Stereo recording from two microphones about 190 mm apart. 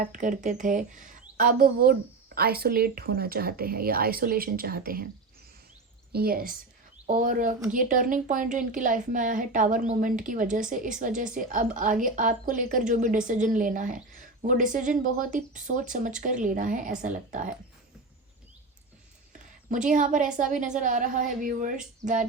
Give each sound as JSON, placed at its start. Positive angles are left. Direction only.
{"t": 0.0, "sound": "a woman's voice", "side_deg": -45}
{"t": 6.1, "sound": "a woman's voice", "side_deg": -50}
{"t": 19.7, "sound": "a woman's voice", "side_deg": -40}